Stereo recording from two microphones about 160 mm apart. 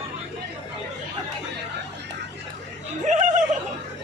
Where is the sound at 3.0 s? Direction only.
50° right (ahead or behind).